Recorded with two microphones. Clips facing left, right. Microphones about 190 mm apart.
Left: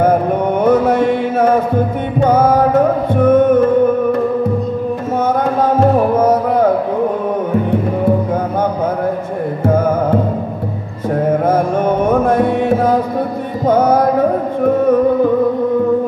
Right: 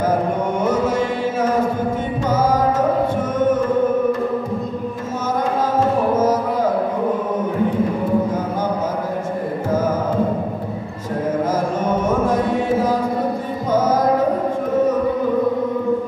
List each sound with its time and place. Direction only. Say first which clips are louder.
0.6 s music: left 8 dB; 60° left (ahead or behind)
11.4 s music: left 6 dB; 60° left (ahead or behind)